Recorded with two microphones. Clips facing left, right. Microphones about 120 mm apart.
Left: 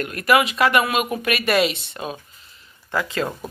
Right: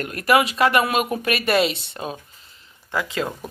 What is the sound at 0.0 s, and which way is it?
Speech, 30° right (ahead or behind).